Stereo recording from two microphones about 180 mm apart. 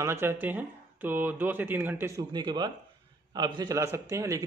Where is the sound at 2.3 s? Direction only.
25° right (ahead or behind).